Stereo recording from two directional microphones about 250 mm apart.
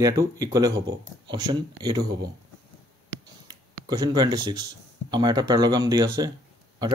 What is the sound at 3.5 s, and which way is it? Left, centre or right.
Speech, centre.